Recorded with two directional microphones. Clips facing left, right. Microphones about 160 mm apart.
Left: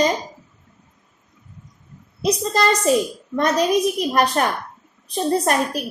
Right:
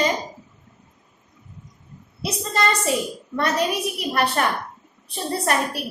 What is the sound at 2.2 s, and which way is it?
Speech, 40° left (ahead or behind).